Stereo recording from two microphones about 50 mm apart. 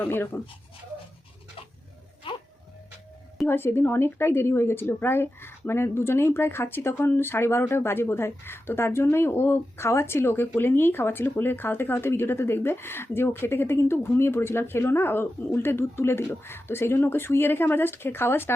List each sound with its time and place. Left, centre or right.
0.0 s a woman's voice: left
3.4 s a woman's voice: left